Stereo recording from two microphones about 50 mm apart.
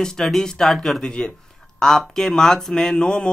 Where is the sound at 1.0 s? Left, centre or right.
Centre.